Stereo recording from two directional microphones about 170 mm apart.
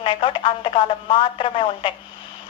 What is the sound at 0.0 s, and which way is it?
Speech, 30° left (ahead or behind).